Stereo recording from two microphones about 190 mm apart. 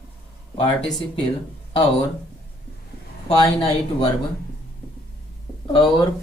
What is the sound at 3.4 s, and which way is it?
Speech, 25° left (ahead or behind).